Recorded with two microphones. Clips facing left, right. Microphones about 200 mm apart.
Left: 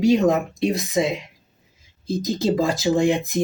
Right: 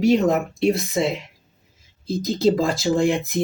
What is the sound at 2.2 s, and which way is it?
Speech, 15° left (ahead or behind).